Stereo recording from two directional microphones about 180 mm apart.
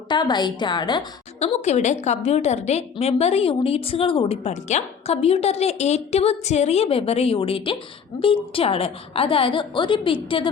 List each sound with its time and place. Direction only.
0.1 s a woman's voice: 25° left (ahead or behind)
1.4 s a woman's voice: 35° left (ahead or behind)